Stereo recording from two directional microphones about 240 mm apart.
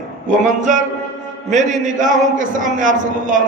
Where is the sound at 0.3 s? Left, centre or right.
Right.